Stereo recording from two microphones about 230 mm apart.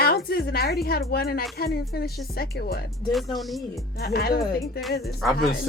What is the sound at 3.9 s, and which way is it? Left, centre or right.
Speech, left.